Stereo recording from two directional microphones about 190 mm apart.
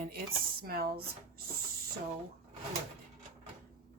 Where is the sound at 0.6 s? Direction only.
55° right (ahead or behind).